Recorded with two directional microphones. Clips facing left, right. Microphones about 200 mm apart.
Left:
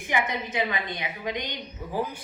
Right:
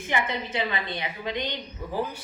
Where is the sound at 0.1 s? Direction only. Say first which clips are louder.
Even; 15° left (ahead or behind).